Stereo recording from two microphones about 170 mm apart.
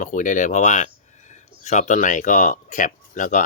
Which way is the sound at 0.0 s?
50° left (ahead or behind).